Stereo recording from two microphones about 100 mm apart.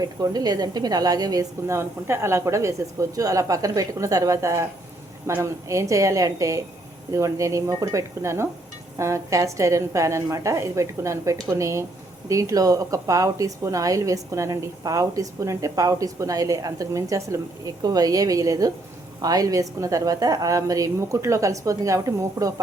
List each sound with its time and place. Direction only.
0.0 s a woman's voice: 40° right (ahead or behind)